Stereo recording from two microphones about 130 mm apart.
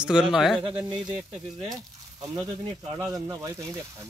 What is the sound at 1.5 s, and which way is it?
Speech, 30° right (ahead or behind).